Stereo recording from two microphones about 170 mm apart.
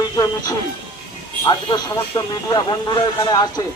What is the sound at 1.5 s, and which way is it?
Speech, 25° left (ahead or behind).